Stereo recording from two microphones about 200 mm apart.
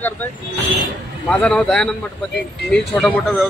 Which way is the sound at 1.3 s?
5° left (ahead or behind).